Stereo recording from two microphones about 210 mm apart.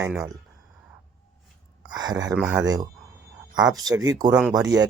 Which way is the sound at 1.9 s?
20° right (ahead or behind).